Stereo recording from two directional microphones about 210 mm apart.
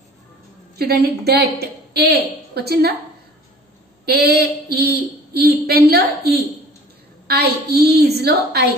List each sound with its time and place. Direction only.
0.7 s speech: 50° right (ahead or behind)
4.0 s speech: 50° right (ahead or behind)